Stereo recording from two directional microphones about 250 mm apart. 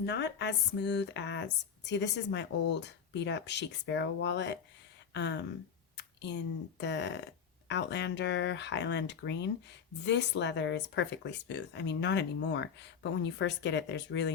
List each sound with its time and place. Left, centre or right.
0.0 s speech: left